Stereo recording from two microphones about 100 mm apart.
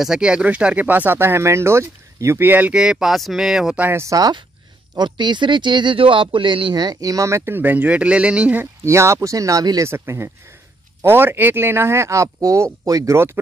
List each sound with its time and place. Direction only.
0.0 s speech: 5° right (ahead or behind)
3.8 s speech: 25° right (ahead or behind)
4.9 s speech: 50° right (ahead or behind)
6.8 s speech: 40° right (ahead or behind); by 8.6 s 15° right (ahead or behind)
8.8 s speech: 30° right (ahead or behind)